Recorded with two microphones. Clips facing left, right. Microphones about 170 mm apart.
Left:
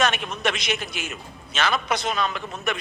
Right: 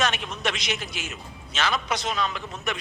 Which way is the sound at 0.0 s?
55° left (ahead or behind).